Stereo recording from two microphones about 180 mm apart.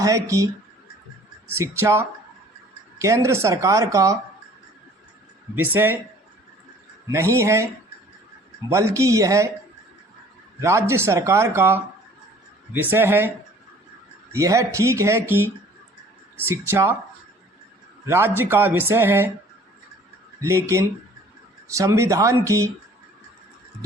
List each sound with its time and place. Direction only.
0.0 s speech: 15° right (ahead or behind)
5.5 s speech: 10° right (ahead or behind)
7.1 s speech: 15° right (ahead or behind)
8.7 s speech: 15° right (ahead or behind)
10.6 s speech: 15° right (ahead or behind)
14.3 s speech: 15° right (ahead or behind)
16.5 s speech: 15° right (ahead or behind)
18.0 s speech: 15° right (ahead or behind)
20.4 s speech: 15° right (ahead or behind)